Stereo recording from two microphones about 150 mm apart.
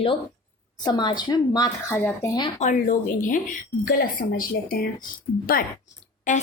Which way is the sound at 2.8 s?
60° left (ahead or behind).